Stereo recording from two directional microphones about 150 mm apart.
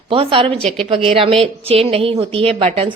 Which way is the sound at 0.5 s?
5° left (ahead or behind).